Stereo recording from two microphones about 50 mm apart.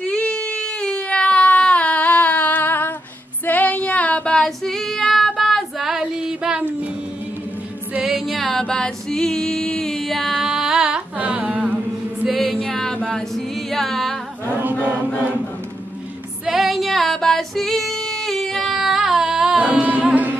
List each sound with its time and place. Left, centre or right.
0.2 s a sound: left
3.4 s female singing: left
4.5 s female singing: centre
8.0 s music: centre
8.5 s music: centre
10.3 s carnatic music: centre
11.1 s music: right
12.4 s music: centre
12.9 s singing: centre
14.6 s chant: right
16.4 s female singing: centre
18.8 s music: centre
19.7 s music: right